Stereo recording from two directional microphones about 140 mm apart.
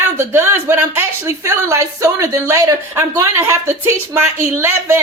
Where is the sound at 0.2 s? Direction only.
15° right (ahead or behind).